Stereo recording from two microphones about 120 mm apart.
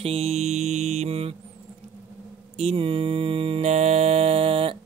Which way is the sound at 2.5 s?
55° right (ahead or behind).